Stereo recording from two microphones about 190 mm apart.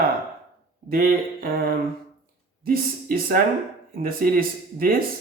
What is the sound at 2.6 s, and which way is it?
Speech, 50° right (ahead or behind).